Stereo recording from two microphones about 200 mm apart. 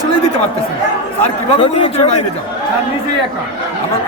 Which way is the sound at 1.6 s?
25° left (ahead or behind).